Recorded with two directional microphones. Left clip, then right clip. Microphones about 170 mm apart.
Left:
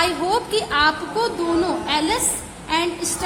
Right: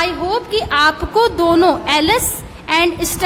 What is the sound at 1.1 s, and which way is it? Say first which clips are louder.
A woman's voice: right 8 dB; 45° right (ahead or behind).